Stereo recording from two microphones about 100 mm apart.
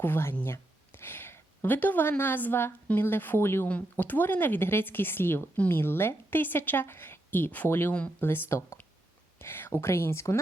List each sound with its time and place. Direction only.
0.0 s speech: 20° left (ahead or behind)